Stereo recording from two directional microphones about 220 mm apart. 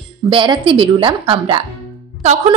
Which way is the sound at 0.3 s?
20° right (ahead or behind).